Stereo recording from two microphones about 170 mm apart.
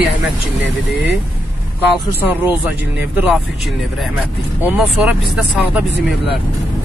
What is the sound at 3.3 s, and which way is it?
A man's voice, centre (ahead or behind).